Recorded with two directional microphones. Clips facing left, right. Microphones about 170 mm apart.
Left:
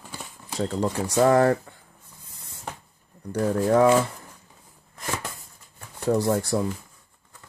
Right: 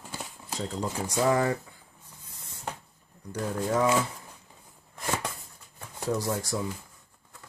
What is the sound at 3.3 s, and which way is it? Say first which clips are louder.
Speech: left 7 dB; 60° left (ahead or behind).